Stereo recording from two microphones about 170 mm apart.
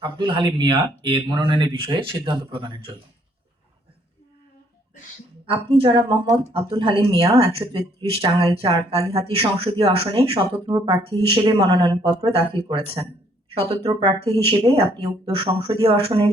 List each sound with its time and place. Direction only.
0.0 s speech: 30° right (ahead or behind)
5.5 s speech: 30° right (ahead or behind)
12.2 s speech: 35° right (ahead or behind)